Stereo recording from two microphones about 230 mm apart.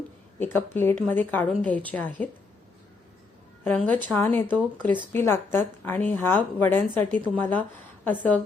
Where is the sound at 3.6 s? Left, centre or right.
Centre.